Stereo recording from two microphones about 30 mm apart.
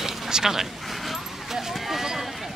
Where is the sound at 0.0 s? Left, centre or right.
Centre.